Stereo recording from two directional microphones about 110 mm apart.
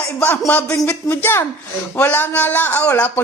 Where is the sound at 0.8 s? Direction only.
20° left (ahead or behind).